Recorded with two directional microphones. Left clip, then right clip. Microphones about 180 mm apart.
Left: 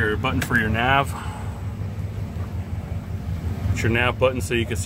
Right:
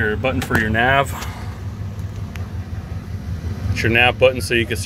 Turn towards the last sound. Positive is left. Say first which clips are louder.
# right 6 dB
turn(degrees=-5)  # may be behind; listen again after turning